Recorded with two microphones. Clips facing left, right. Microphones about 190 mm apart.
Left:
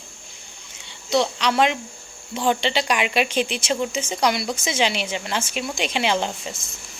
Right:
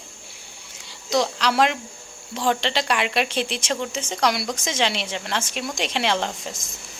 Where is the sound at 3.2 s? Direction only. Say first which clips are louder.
Left 3 dB; 35° right (ahead or behind).